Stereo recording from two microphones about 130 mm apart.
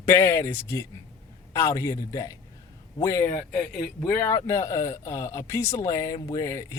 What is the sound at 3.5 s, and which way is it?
Speech, 5° left (ahead or behind).